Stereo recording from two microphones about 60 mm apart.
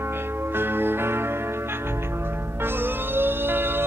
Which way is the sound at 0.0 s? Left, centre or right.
Right.